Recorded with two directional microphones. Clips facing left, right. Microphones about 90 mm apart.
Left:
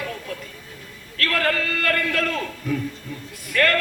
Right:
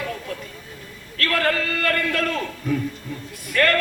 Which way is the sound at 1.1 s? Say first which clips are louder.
Right 1 dB; 35° right (ahead or behind).